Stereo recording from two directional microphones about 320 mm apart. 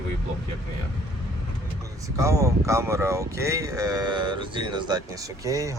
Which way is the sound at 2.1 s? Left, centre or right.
Centre.